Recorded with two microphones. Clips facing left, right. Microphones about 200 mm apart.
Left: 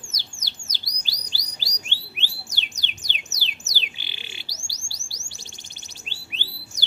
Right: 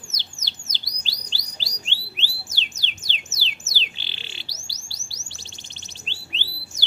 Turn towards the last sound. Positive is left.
turn(degrees=15)  # may be behind; listen again after turning